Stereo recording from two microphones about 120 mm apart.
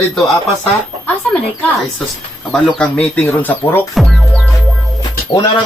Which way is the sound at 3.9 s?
Centre (ahead or behind).